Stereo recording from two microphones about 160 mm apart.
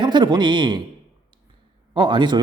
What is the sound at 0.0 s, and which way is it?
Speech, 30° right (ahead or behind).